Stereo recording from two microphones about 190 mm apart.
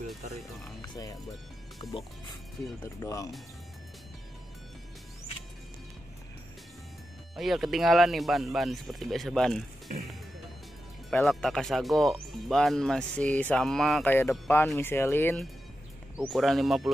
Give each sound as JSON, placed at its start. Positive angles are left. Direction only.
{"t": 0.8, "sound": "speech", "side_deg": 20}
{"t": 2.6, "sound": "speech", "side_deg": 15}
{"t": 7.3, "sound": "speech", "side_deg": 0}
{"t": 11.2, "sound": "speech", "side_deg": 0}